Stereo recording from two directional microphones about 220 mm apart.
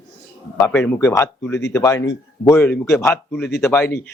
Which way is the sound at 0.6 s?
5° left (ahead or behind).